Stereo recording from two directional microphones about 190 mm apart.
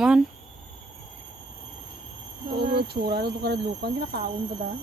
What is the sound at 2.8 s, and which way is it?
Speech, 55° right (ahead or behind).